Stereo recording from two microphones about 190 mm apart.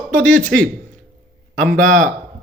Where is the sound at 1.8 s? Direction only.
40° right (ahead or behind).